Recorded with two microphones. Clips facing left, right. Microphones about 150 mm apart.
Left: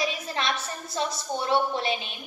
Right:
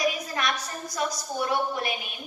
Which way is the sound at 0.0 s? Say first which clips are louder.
Right 1 dB; 25° left (ahead or behind).